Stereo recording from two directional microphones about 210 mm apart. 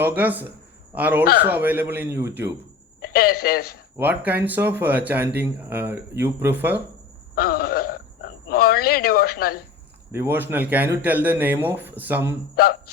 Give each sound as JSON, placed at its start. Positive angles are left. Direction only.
{"t": 0.0, "sound": "speech", "side_deg": -10}
{"t": 1.2, "sound": "a man's voice", "side_deg": 45}
{"t": 1.5, "sound": "speech", "side_deg": -10}
{"t": 3.0, "sound": "a man's voice", "side_deg": 45}
{"t": 3.9, "sound": "speech", "side_deg": -10}
{"t": 7.3, "sound": "a sound", "side_deg": 45}
{"t": 10.1, "sound": "speech", "side_deg": -10}